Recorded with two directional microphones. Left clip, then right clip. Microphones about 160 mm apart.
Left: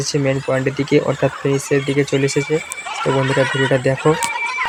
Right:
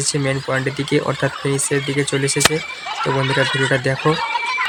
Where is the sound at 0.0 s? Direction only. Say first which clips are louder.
Left 2 dB; 5° left (ahead or behind).